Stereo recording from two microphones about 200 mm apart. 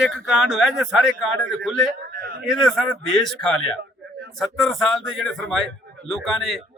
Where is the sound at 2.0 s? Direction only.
45° right (ahead or behind).